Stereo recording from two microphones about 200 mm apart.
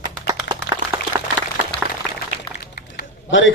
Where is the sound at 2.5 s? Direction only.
50° left (ahead or behind).